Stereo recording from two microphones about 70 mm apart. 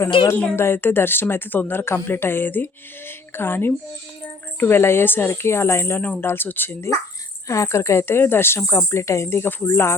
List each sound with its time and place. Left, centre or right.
0.5 s speech: left
6.0 s speech: left
7.4 s speech: left